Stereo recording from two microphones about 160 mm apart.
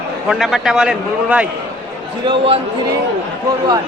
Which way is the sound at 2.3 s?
35° right (ahead or behind).